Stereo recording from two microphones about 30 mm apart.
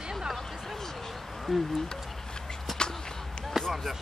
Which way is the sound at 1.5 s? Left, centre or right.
Centre.